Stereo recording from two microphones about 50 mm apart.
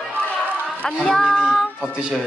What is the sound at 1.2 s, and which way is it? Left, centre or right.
Child singing, centre.